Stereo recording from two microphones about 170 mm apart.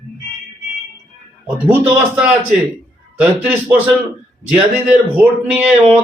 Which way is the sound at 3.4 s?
10° right (ahead or behind).